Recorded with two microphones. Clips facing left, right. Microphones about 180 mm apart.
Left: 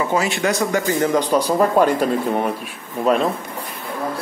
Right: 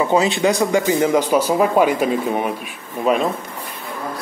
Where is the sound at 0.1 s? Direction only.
20° right (ahead or behind).